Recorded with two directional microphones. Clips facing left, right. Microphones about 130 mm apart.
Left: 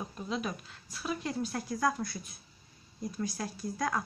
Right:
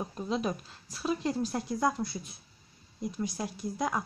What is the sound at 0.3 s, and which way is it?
Speech, 30° right (ahead or behind).